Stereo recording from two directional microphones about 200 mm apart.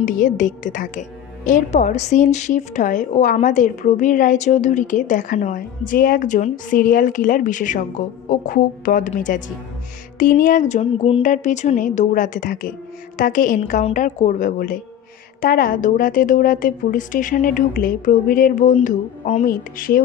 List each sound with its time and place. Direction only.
0.0 s a woman's voice: 40° left (ahead or behind)